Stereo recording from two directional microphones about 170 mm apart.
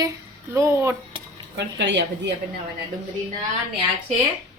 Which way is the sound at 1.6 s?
90° right.